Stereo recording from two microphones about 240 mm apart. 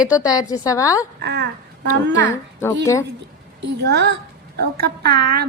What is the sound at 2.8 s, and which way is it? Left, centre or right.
Speech, centre.